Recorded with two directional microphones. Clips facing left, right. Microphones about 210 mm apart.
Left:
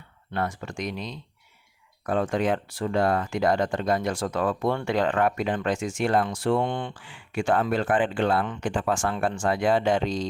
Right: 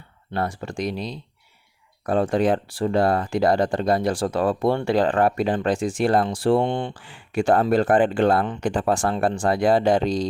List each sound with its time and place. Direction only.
0.3 s speech: 30° right (ahead or behind)